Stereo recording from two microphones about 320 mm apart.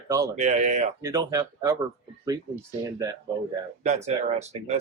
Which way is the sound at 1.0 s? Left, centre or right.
Centre.